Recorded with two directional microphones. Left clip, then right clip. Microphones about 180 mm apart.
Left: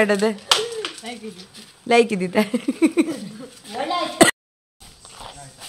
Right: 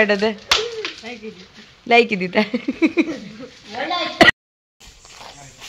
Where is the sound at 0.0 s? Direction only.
10° left (ahead or behind).